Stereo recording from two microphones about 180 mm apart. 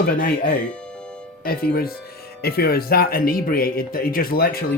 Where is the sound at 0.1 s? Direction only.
55° left (ahead or behind).